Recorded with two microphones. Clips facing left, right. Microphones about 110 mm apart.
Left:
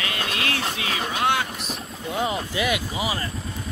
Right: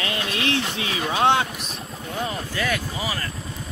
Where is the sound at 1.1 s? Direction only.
25° right (ahead or behind).